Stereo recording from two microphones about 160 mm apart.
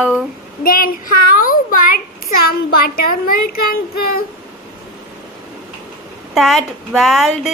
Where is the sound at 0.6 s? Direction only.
60° left (ahead or behind).